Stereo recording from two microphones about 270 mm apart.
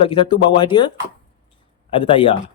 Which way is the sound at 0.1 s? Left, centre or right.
Centre.